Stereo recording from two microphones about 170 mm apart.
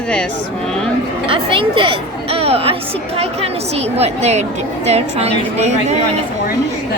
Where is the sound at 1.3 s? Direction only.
30° right (ahead or behind).